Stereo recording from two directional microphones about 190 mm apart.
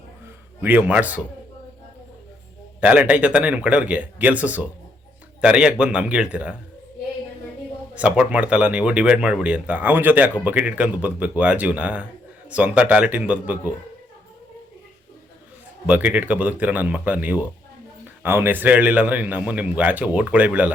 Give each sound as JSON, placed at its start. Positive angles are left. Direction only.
{"t": 0.6, "sound": "speech", "side_deg": -10}
{"t": 2.8, "sound": "a man's voice", "side_deg": -5}
{"t": 7.9, "sound": "speech", "side_deg": -5}
{"t": 15.9, "sound": "speech", "side_deg": -5}